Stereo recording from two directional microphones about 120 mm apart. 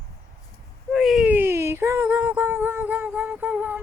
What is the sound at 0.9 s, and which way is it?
Whimper, 5° right (ahead or behind).